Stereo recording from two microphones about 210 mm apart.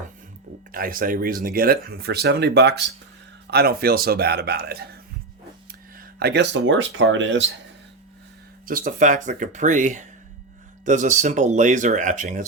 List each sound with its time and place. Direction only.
0.7 s speech: 40° right (ahead or behind)
6.0 s speech: 50° right (ahead or behind)
8.6 s speech: 40° right (ahead or behind)